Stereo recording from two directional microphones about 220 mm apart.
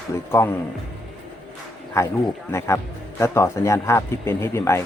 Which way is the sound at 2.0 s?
15° left (ahead or behind).